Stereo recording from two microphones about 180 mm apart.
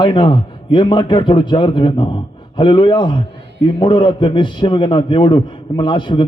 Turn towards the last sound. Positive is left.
turn(degrees=25)  # may be behind; listen again after turning